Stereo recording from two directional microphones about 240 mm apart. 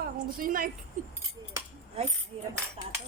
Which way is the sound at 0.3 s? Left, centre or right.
Right.